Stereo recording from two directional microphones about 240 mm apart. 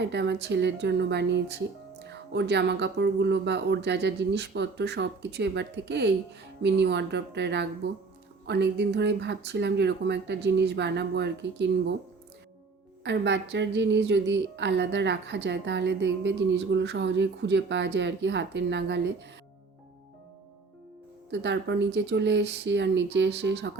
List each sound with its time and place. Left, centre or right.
0.0 s speech: right
13.1 s speech: right
21.2 s speech: right